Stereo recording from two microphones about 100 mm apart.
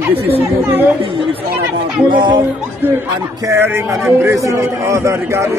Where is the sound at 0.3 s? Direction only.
20° right (ahead or behind).